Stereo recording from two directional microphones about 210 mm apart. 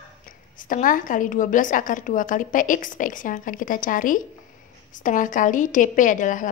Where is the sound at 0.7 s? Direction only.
40° left (ahead or behind).